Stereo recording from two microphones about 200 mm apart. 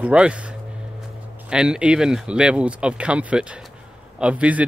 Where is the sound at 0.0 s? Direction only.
5° right (ahead or behind).